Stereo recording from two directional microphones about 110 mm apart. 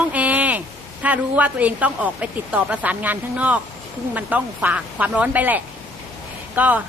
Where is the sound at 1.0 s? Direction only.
15° right (ahead or behind).